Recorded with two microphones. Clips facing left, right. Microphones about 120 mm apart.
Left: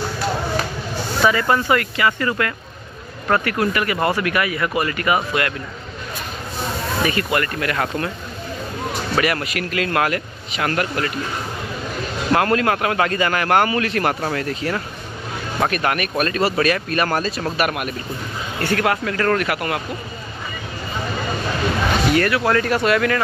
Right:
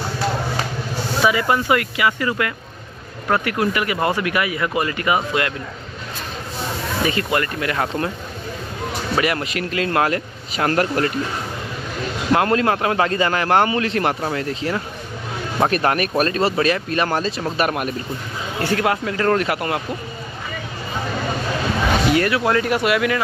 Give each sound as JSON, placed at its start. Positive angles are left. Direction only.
{"t": 1.2, "sound": "a man's voice", "side_deg": -10}
{"t": 7.1, "sound": "a man's voice", "side_deg": -25}
{"t": 9.1, "sound": "a man's voice", "side_deg": -20}
{"t": 12.4, "sound": "a man's voice", "side_deg": -25}
{"t": 15.6, "sound": "a man's voice", "side_deg": -30}
{"t": 17.6, "sound": "speech", "side_deg": -35}
{"t": 18.6, "sound": "a man's voice", "side_deg": -15}
{"t": 22.1, "sound": "speech", "side_deg": -20}